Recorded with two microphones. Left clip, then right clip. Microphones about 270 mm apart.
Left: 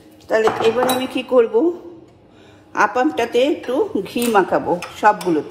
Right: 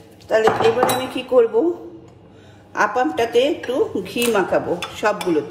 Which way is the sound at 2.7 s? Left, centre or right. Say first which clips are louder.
Left 2 dB; centre.